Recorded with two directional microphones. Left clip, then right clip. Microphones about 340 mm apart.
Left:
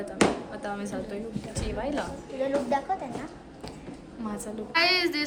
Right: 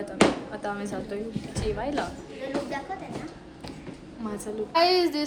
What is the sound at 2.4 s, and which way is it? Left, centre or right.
Speech, centre.